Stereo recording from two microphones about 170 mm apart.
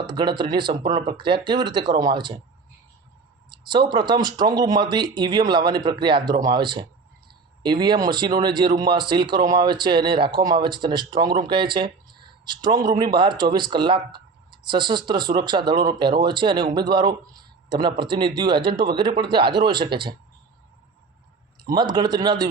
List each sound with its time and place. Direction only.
0.1 s speech: 25° right (ahead or behind)
3.5 s speech: 25° right (ahead or behind)
21.6 s speech: 25° right (ahead or behind)